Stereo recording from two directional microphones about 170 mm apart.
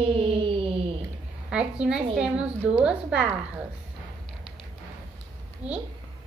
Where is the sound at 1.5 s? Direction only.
5° right (ahead or behind).